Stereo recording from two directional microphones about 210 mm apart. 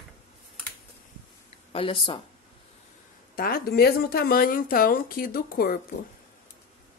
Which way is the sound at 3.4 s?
45° left (ahead or behind).